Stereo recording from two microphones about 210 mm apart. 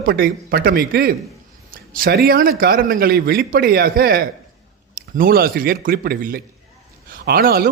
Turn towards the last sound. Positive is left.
turn(degrees=-45)  # may be behind; listen again after turning